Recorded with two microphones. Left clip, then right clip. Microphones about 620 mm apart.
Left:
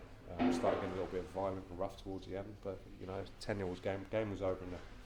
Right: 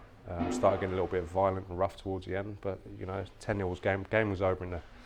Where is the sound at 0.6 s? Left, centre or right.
Right.